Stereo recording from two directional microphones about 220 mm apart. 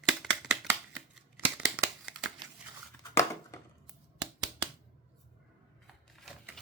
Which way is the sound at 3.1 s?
10° left (ahead or behind).